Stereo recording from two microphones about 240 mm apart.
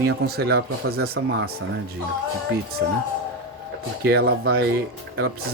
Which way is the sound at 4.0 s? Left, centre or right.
Right.